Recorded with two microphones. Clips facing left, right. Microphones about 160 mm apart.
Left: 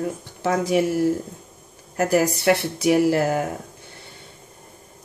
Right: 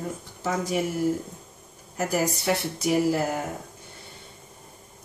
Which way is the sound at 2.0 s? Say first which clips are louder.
Left 6 dB; 75° left (ahead or behind).